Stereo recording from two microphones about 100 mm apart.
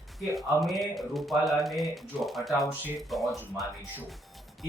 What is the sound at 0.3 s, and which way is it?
Speech, centre (ahead or behind).